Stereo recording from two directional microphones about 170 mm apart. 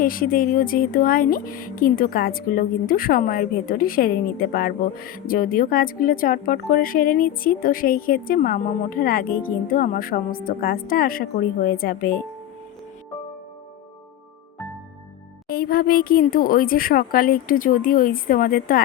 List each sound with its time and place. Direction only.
0.0 s speech: 55° left (ahead or behind)
15.4 s speech: 60° left (ahead or behind)